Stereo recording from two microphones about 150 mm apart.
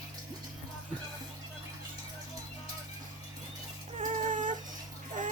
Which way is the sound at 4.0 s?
60° right (ahead or behind).